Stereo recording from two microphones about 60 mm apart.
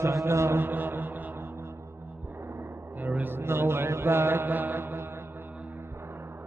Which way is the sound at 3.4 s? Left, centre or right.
Right.